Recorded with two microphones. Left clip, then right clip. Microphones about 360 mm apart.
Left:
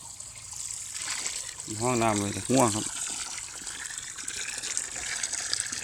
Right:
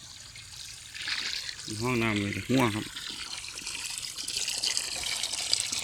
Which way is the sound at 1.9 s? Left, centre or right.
Centre.